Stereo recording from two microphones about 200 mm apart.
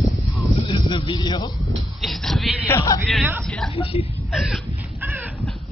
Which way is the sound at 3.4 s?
Centre (ahead or behind).